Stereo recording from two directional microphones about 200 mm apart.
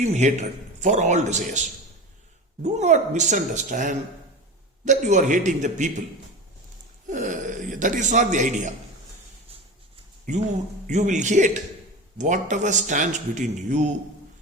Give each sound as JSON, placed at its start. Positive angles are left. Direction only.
{"t": 0.0, "sound": "speech", "side_deg": -35}
{"t": 7.1, "sound": "a sound", "side_deg": -40}
{"t": 10.8, "sound": "speech", "side_deg": -40}